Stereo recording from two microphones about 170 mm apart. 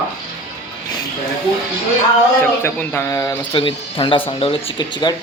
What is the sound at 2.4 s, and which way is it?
Speech, 10° left (ahead or behind).